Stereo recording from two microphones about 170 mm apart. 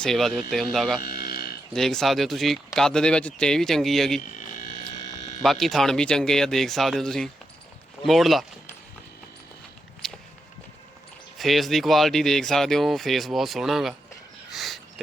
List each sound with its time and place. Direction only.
0.0 s speech: centre (ahead or behind)
1.0 s livestock: 60° left (ahead or behind)
1.7 s speech: centre (ahead or behind)
4.2 s a sound: 50° left (ahead or behind)
4.8 s mains hum: 40° left (ahead or behind)
5.4 s speech: centre (ahead or behind)
10.0 s walk: 5° left (ahead or behind)
11.3 s speech: centre (ahead or behind)
14.5 s sniff: centre (ahead or behind)